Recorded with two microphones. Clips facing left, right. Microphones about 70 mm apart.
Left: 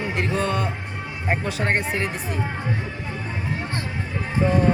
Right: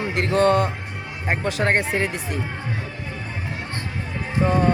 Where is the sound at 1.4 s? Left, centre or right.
Right.